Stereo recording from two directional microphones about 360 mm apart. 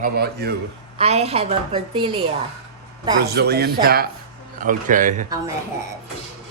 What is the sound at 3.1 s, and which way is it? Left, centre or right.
Speech, right.